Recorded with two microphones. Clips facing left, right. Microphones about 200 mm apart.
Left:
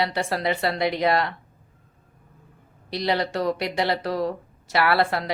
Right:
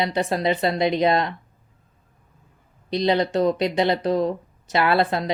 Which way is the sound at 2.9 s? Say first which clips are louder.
Right 4 dB; 20° right (ahead or behind).